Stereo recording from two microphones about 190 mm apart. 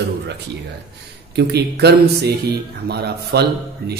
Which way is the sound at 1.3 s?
60° right (ahead or behind).